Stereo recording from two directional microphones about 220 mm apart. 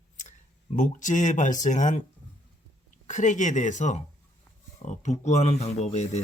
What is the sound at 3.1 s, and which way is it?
Speech, 35° left (ahead or behind).